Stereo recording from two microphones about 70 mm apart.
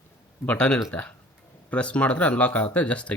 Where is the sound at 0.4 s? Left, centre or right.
Centre.